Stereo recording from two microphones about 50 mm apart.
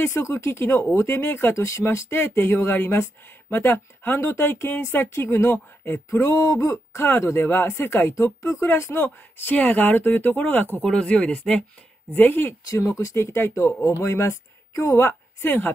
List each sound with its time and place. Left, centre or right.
0.2 s speech: left
1.5 s speech: left
4.2 s speech: left
5.0 s speech: left
6.1 s speech: left
7.0 s speech: left
8.1 s speech: left
8.9 s speech: left
9.6 s speech: left
10.8 s speech: centre
12.1 s speech: left
12.6 s speech: left
14.0 s speech: left
15.0 s a woman's voice: left